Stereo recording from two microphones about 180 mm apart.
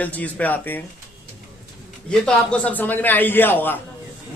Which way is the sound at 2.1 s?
5° left (ahead or behind).